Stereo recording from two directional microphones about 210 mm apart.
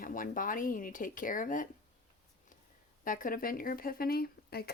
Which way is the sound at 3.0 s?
40° left (ahead or behind).